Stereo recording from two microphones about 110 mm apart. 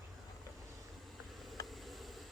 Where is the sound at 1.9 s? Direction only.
Centre (ahead or behind).